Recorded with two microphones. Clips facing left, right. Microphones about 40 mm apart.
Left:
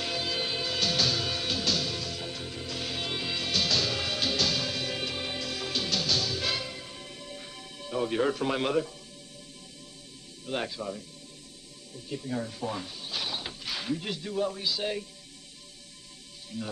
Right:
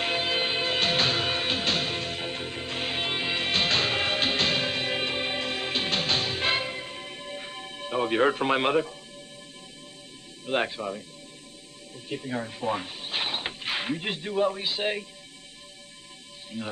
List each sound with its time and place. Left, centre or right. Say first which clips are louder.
0.0 s music: right 5 dB; right
10.4 s speech: right 5 dB; right
12.1 s speech: right 2 dB; right
16.5 s speech: right 2 dB; right